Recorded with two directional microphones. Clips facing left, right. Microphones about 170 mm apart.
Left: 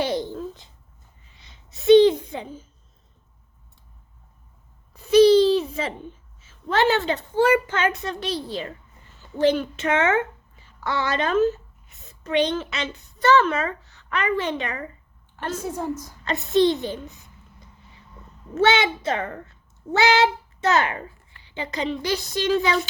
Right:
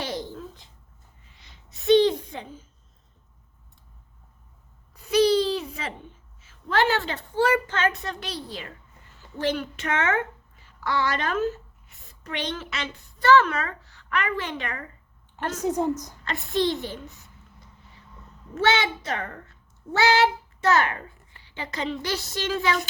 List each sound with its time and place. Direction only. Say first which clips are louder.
0.0 s a sound: left 7 dB; 25° left (ahead or behind)
4.9 s a sound: left 6 dB; 25° left (ahead or behind)
6.4 s a woman's voice: left 3 dB; 25° left (ahead or behind)
15.6 s a woman's voice: right 8 dB; 20° right (ahead or behind)
16.2 s a woman's voice: left 6 dB; 20° left (ahead or behind)
18.5 s a woman's voice: left 4 dB; 20° left (ahead or behind)